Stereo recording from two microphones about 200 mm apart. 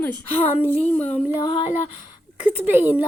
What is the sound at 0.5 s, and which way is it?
Speech, 10° right (ahead or behind).